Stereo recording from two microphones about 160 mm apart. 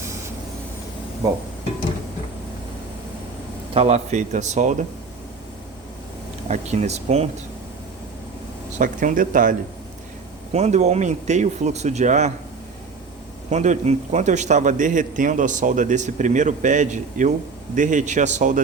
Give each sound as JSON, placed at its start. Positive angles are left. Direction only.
{"t": 0.0, "sound": "vehicle", "side_deg": -20}
{"t": 3.8, "sound": "a man's voice", "side_deg": -40}
{"t": 6.5, "sound": "a man's voice", "side_deg": -45}
{"t": 8.8, "sound": "speech", "side_deg": -55}
{"t": 10.5, "sound": "a man's voice", "side_deg": -45}
{"t": 13.5, "sound": "a man's voice", "side_deg": -45}